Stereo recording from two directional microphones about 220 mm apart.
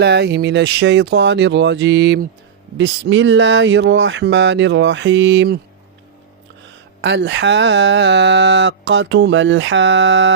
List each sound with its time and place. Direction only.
0.0 s speech: 50° right (ahead or behind)
7.0 s speech: 50° right (ahead or behind)